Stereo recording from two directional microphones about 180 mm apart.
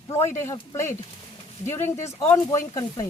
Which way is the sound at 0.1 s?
15° left (ahead or behind).